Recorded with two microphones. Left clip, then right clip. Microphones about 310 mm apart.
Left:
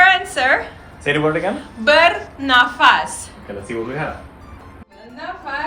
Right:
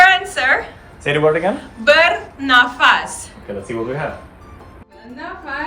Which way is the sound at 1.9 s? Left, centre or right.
Centre.